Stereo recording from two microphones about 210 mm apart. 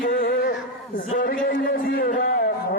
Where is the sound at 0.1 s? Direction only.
40° left (ahead or behind).